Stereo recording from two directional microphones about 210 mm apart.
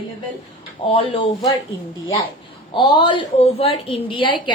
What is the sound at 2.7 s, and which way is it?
A woman's voice, 20° left (ahead or behind).